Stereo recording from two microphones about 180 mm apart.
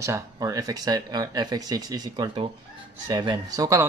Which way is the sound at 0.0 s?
20° right (ahead or behind).